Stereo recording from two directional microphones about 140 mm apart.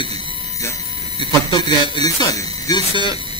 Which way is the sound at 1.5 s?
30° left (ahead or behind).